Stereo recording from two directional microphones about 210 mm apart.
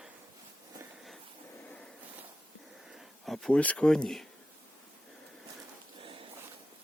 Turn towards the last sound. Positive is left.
turn(degrees=-25)  # may be behind; listen again after turning